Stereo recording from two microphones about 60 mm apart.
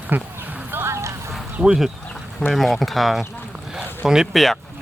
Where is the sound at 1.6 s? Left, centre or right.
Centre.